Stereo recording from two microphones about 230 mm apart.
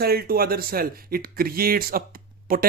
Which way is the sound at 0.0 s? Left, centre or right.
Right.